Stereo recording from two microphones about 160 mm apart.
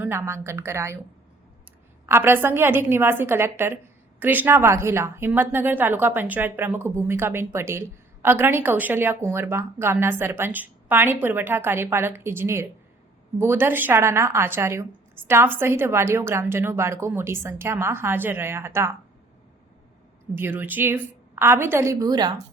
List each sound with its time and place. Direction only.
0.0 s a woman's voice: 15° right (ahead or behind)
2.0 s a woman's voice: 15° right (ahead or behind)
20.3 s a woman's voice: 15° right (ahead or behind)